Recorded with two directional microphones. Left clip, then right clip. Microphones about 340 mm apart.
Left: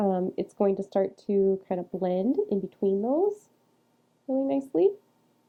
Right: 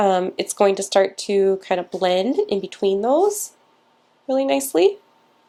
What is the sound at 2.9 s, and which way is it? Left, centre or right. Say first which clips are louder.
A woman's voice: right 11 dB; centre.